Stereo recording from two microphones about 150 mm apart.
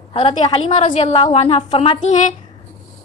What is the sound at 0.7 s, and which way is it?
A woman's voice, 50° left (ahead or behind).